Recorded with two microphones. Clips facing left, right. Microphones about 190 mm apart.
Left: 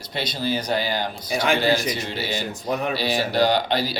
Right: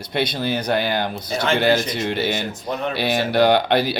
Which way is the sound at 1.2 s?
10° left (ahead or behind).